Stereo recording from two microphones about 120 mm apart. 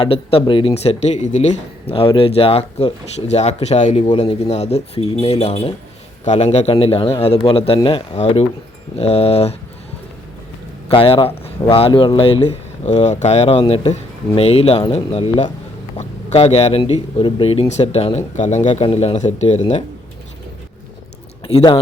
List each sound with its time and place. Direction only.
0.0 s speech: 50° left (ahead or behind)
0.7 s speech: 60° left (ahead or behind)
8.2 s speech: 65° left (ahead or behind)
10.8 s speech: 50° left (ahead or behind); by 13.6 s 65° left (ahead or behind)
13.6 s speech: 50° left (ahead or behind)
16.0 s speech: 65° left (ahead or behind)
18.3 s speech: 80° left